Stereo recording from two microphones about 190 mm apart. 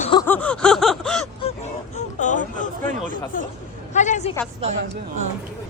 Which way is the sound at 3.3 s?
45° left (ahead or behind).